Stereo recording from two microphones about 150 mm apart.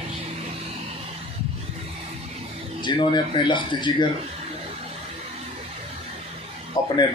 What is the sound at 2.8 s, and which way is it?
Speech, 30° left (ahead or behind).